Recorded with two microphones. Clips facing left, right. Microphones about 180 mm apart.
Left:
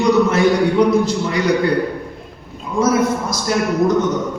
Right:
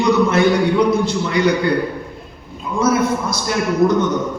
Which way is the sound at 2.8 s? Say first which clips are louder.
Left 1 dB; 40° left (ahead or behind).